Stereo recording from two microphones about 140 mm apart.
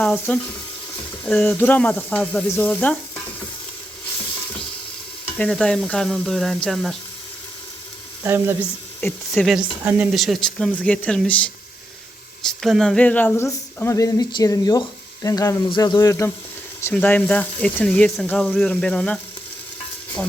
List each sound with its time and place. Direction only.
0.0 s speech: 10° left (ahead or behind)
5.4 s speech: 5° left (ahead or behind)
8.2 s frying: 15° right (ahead or behind)
9.0 s speech: 5° left (ahead or behind)
9.8 s frying: 10° right (ahead or behind)
10.2 s speech: centre (ahead or behind); by 16.3 s 20° left (ahead or behind)
16.9 s speech: 10° left (ahead or behind)